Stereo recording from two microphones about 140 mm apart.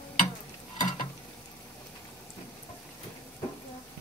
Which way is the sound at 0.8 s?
65° left (ahead or behind).